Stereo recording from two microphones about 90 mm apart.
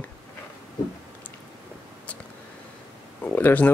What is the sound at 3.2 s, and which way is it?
Speech, 20° left (ahead or behind).